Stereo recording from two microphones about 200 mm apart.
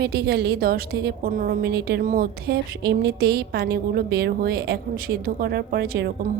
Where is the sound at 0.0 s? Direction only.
55° right (ahead or behind).